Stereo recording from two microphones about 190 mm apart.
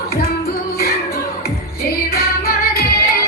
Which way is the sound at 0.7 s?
55° left (ahead or behind).